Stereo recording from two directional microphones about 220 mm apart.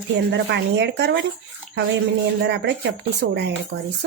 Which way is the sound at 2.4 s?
50° right (ahead or behind).